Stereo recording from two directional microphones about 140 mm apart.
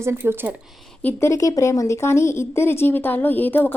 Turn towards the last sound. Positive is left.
turn(degrees=15)  # may be behind; listen again after turning